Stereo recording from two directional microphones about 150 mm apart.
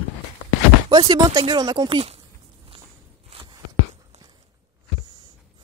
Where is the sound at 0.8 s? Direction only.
30° right (ahead or behind).